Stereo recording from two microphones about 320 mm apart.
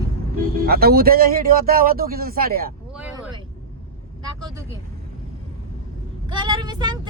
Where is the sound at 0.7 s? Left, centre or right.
Right.